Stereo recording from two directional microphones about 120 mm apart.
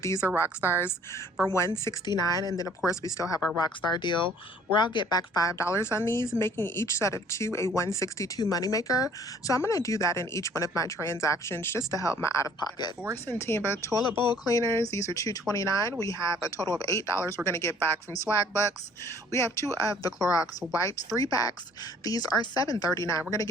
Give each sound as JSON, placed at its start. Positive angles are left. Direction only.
{"t": 0.0, "sound": "speech", "side_deg": 25}
{"t": 0.4, "sound": "a woman's voice", "side_deg": -20}
{"t": 1.5, "sound": "a woman's voice", "side_deg": 20}
{"t": 3.6, "sound": "a woman's voice", "side_deg": 40}
{"t": 14.2, "sound": "a woman's voice", "side_deg": 35}